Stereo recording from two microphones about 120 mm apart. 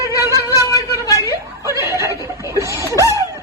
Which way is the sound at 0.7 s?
30° left (ahead or behind).